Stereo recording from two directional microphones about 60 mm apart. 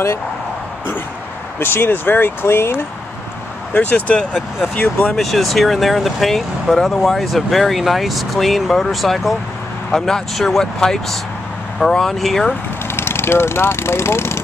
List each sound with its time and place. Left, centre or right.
1.6 s speech: left
3.7 s speech: left
5.1 s speech: centre
9.8 s speech: centre
12.9 s speech: left